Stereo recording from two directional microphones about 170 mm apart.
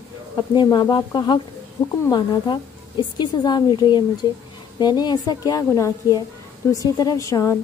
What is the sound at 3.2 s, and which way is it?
Speech, 25° left (ahead or behind).